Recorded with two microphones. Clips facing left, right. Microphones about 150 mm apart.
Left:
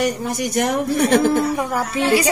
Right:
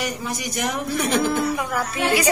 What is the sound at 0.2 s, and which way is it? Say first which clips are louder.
A woman's voice: left 6 dB; 60° left (ahead or behind).